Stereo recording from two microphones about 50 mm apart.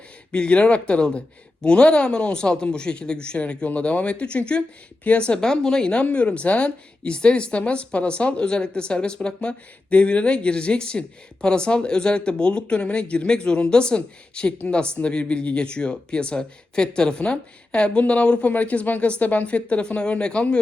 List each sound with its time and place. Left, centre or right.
0.3 s speech: left